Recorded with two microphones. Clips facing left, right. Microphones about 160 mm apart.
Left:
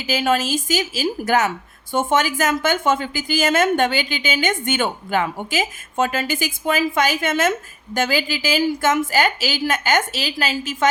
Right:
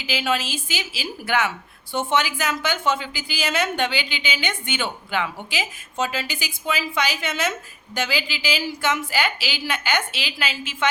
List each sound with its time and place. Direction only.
0.0 s a woman's voice: 45° left (ahead or behind)